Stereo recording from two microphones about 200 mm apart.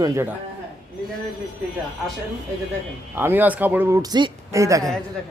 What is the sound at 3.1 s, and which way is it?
A man's voice, 10° right (ahead or behind).